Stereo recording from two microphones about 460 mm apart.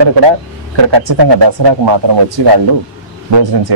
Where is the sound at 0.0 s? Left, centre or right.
Right.